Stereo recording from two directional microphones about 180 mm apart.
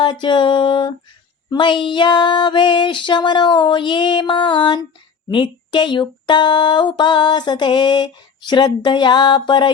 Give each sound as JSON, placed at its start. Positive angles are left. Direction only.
{"t": 0.0, "sound": "speech", "side_deg": 25}